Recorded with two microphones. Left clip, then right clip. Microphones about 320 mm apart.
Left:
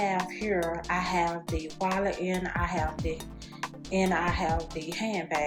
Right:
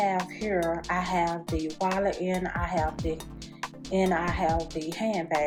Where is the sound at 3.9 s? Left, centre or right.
Centre.